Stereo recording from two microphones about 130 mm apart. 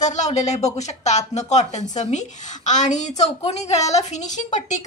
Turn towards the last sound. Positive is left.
turn(degrees=65)  # may be behind; listen again after turning